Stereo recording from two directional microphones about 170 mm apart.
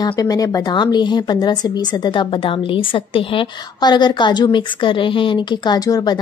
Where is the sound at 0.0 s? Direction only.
20° left (ahead or behind).